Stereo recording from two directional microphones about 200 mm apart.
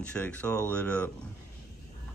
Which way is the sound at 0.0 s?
5° left (ahead or behind).